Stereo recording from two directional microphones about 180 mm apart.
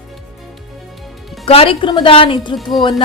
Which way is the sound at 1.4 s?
30° left (ahead or behind).